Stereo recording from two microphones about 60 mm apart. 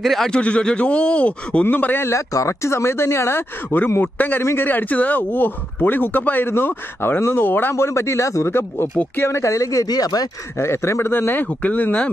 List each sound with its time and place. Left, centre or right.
0.0 s speech: centre
0.3 s speech: centre
2.0 s speech: left
7.7 s speech: left
9.4 s speech: left
10.6 s speech: left
11.4 s speech: left